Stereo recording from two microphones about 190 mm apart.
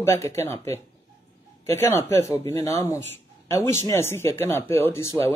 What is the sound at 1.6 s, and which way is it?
Speech, 15° left (ahead or behind).